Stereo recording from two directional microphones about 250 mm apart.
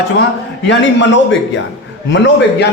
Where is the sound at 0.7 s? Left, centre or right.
Left.